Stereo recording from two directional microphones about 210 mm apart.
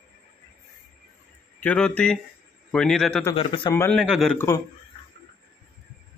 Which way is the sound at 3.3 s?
25° left (ahead or behind).